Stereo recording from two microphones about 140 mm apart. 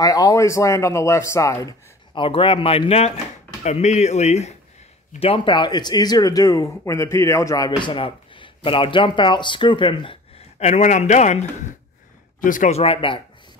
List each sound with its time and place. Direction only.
0.0 s speech: 25° left (ahead or behind)
2.1 s speech: 40° left (ahead or behind)
5.2 s speech: 40° left (ahead or behind)
10.6 s a man's voice: 60° left (ahead or behind)
12.4 s speech: 70° left (ahead or behind)
12.7 s speech: 40° left (ahead or behind)